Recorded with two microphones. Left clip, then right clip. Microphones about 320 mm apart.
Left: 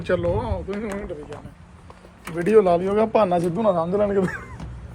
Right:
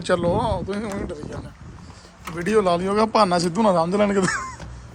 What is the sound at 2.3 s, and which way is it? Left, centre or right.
Speech, centre.